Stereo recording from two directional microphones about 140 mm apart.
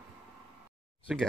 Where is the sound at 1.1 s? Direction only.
5° right (ahead or behind).